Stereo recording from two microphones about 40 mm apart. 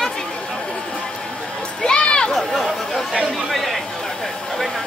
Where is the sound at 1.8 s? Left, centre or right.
Left.